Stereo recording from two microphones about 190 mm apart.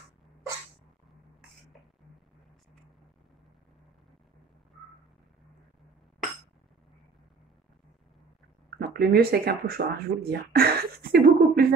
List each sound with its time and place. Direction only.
8.6 s speech: 55° right (ahead or behind)